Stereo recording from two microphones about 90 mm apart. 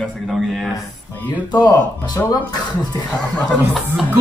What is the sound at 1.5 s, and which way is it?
Speech, 45° left (ahead or behind).